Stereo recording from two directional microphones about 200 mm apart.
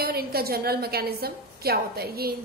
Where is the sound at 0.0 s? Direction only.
50° right (ahead or behind).